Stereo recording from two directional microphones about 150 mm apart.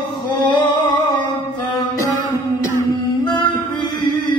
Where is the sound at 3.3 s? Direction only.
30° left (ahead or behind).